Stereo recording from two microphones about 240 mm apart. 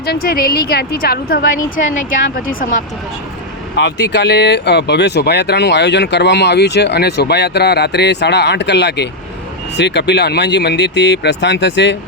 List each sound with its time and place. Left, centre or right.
0.0 s a woman's voice: left
3.8 s speech: left